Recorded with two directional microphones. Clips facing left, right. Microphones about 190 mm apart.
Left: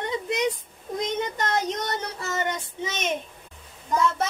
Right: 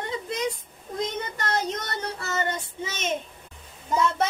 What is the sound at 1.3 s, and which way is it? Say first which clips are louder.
Child singing: left 2 dB; 20° left (ahead or behind).